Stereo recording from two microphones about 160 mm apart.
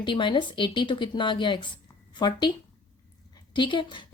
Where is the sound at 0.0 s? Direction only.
30° left (ahead or behind).